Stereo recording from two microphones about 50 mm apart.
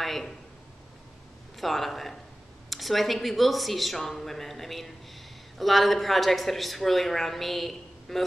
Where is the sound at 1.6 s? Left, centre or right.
Centre.